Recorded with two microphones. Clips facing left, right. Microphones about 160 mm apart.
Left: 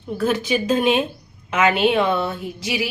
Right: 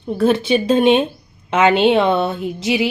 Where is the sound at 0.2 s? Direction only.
30° right (ahead or behind).